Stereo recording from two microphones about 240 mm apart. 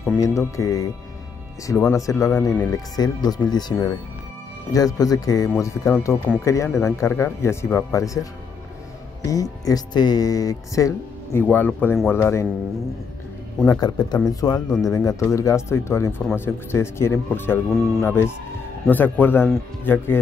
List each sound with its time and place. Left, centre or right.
0.1 s speech: centre
13.7 s speech: centre